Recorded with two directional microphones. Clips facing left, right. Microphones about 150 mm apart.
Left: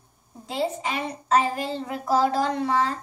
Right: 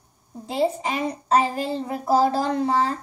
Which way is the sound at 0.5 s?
35° right (ahead or behind).